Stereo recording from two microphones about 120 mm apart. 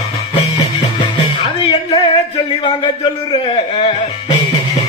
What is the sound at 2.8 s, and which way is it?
Speech, 40° left (ahead or behind).